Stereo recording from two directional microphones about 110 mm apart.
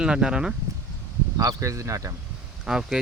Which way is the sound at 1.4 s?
30° right (ahead or behind).